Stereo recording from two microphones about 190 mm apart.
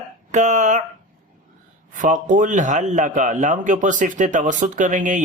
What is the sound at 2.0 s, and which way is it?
A man's voice, 45° right (ahead or behind).